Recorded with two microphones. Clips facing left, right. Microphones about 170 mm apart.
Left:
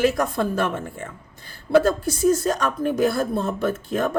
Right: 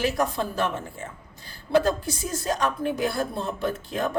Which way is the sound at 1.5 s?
50° left (ahead or behind).